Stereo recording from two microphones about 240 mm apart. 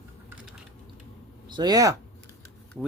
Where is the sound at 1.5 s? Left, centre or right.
Centre.